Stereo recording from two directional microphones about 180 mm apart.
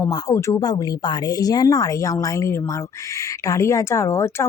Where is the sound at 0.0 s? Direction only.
20° left (ahead or behind).